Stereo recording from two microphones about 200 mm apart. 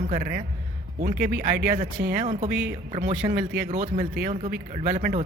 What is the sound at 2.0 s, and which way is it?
Speech, 55° right (ahead or behind).